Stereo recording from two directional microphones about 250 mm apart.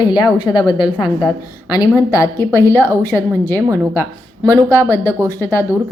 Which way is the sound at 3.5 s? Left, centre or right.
Centre.